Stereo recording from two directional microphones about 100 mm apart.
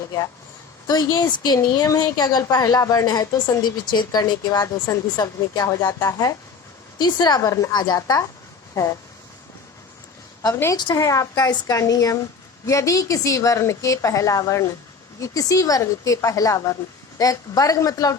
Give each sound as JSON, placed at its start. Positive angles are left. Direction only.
{"t": 0.9, "sound": "speech", "side_deg": 40}
{"t": 7.0, "sound": "speech", "side_deg": 45}
{"t": 7.7, "sound": "speech", "side_deg": 45}
{"t": 10.5, "sound": "a woman's voice", "side_deg": 25}